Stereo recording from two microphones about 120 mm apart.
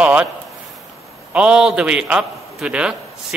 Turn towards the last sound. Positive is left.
turn(degrees=-5)  # may be behind; listen again after turning